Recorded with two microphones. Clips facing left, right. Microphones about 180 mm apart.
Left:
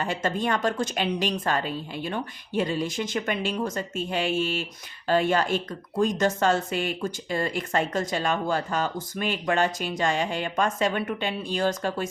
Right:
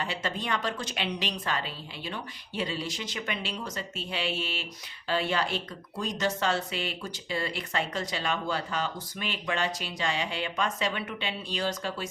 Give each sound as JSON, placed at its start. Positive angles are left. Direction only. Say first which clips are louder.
{"t": 0.0, "sound": "a woman's voice", "louder": "left 6 dB", "side_deg": 45}